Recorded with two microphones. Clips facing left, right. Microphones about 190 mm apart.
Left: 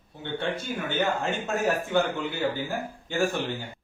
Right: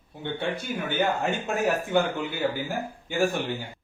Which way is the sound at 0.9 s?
15° right (ahead or behind).